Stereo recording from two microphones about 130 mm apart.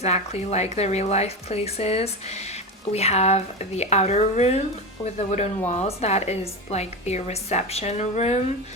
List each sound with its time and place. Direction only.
0.0 s a woman's voice: 55° left (ahead or behind)